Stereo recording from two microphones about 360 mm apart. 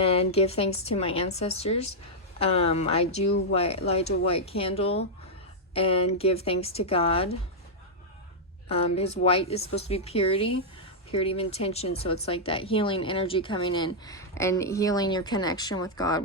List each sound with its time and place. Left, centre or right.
0.0 s speech: centre
8.7 s speech: centre